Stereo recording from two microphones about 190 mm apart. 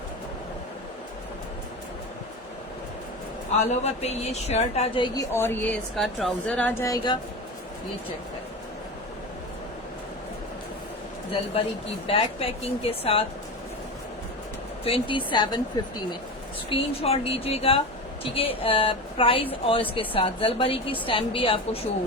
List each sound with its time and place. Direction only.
3.7 s a woman's voice: 35° left (ahead or behind)
5.1 s speech: 10° left (ahead or behind)
6.0 s speech: centre (ahead or behind); by 7.2 s 20° left (ahead or behind)
12.0 s a woman's voice: 30° left (ahead or behind)
14.8 s a woman's voice: 30° left (ahead or behind)
16.6 s a woman's voice: 30° left (ahead or behind)